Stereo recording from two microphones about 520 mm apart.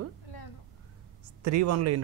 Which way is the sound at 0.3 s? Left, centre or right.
Left.